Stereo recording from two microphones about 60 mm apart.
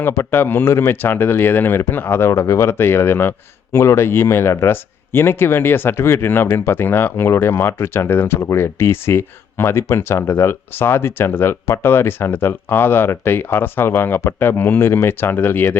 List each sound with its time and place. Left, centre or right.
0.1 s speech: left